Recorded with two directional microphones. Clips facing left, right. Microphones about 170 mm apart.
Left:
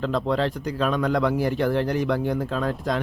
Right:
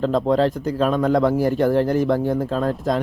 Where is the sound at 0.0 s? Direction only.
40° right (ahead or behind).